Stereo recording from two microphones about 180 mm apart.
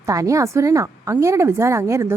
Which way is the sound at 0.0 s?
15° right (ahead or behind).